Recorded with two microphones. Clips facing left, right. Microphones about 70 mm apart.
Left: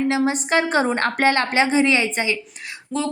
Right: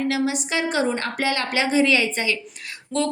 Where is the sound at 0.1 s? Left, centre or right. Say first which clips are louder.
Left 4 dB; left.